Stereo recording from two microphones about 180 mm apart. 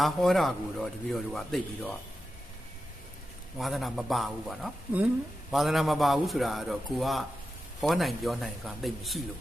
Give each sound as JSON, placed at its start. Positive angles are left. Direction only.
{"t": 0.0, "sound": "a man's voice", "side_deg": 0}
{"t": 3.6, "sound": "a man's voice", "side_deg": 0}